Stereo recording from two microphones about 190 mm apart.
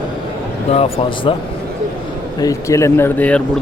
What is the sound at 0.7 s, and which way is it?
Speech, 30° left (ahead or behind).